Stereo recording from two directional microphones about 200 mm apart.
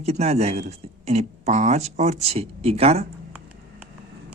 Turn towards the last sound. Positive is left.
turn(degrees=-30)  # may be behind; listen again after turning